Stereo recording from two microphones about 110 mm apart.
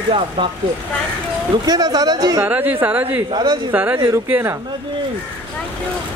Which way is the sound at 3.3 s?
40° right (ahead or behind).